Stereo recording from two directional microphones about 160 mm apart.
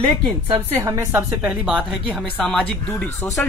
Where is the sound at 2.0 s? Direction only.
10° left (ahead or behind).